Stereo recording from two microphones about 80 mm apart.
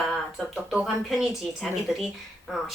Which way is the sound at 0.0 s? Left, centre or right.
Centre.